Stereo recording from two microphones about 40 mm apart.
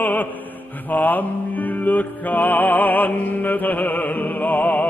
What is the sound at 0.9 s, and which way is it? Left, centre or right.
Music, left.